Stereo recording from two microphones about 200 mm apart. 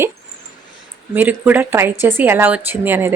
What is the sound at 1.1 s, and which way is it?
A woman's voice, 10° right (ahead or behind).